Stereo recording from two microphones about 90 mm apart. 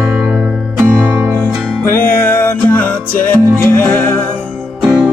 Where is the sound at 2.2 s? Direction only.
20° left (ahead or behind).